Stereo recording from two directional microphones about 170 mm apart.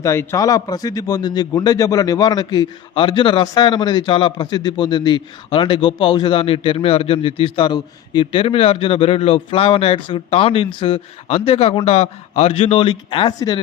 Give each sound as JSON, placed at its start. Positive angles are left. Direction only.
{"t": 0.0, "sound": "a man's voice", "side_deg": 15}